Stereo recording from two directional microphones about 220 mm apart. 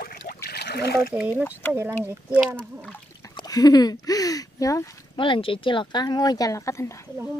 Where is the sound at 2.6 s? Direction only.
5° left (ahead or behind).